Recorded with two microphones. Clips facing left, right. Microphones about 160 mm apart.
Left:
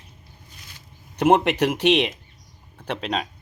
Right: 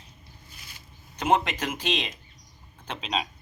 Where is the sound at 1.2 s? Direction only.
65° left (ahead or behind).